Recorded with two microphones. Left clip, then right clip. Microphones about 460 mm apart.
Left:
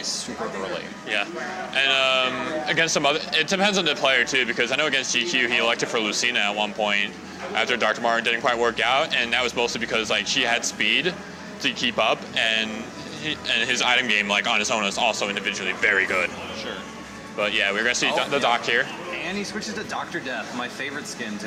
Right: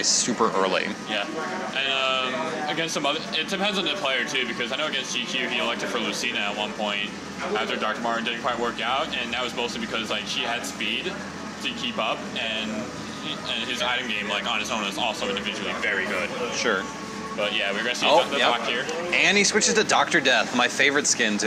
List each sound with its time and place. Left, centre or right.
0.0 s speech: right
1.7 s a man's voice: left
17.4 s speech: left
19.2 s speech: right